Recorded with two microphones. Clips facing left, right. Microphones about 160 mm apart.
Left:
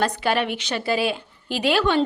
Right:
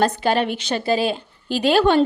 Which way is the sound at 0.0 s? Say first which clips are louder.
Right 3 dB; 35° right (ahead or behind).